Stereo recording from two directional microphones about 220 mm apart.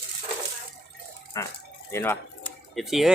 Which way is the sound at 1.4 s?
15° left (ahead or behind).